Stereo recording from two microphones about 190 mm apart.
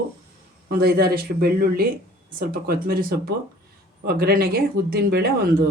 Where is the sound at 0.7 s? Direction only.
55° right (ahead or behind).